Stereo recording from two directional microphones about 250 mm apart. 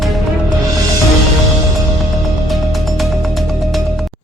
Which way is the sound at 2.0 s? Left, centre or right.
Centre.